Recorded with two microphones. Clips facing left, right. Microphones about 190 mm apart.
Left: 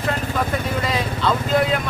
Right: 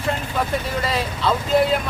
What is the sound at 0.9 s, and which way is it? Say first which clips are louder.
Speech: even; centre (ahead or behind).